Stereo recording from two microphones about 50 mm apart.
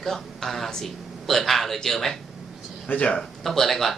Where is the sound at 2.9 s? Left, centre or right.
Left.